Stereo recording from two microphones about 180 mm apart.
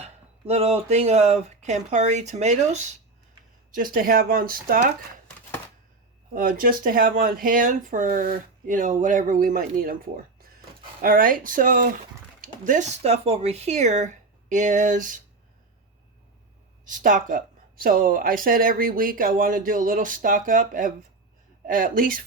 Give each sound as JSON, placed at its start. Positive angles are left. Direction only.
{"t": 0.0, "sound": "speech", "side_deg": -35}
{"t": 3.8, "sound": "speech", "side_deg": -50}
{"t": 6.3, "sound": "speech", "side_deg": -50}
{"t": 11.0, "sound": "speech", "side_deg": -50}
{"t": 16.8, "sound": "speech", "side_deg": -50}